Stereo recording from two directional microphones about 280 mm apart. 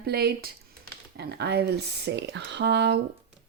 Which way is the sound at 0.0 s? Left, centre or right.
Right.